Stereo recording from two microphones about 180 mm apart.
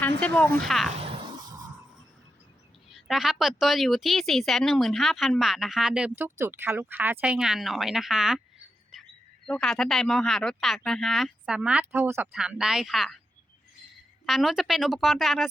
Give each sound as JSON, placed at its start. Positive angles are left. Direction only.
{"t": 0.2, "sound": "speech", "side_deg": 10}
{"t": 0.9, "sound": "music", "side_deg": -30}
{"t": 2.9, "sound": "speech", "side_deg": 0}
{"t": 9.5, "sound": "speech", "side_deg": 0}
{"t": 14.3, "sound": "speech", "side_deg": 0}